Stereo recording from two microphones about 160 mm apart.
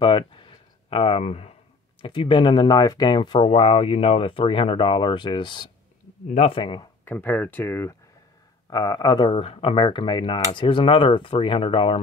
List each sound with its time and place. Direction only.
0.0 s a sound: 30° left (ahead or behind)
2.0 s speech: 30° left (ahead or behind)
7.1 s speech: 10° left (ahead or behind)
8.6 s speech: 25° left (ahead or behind)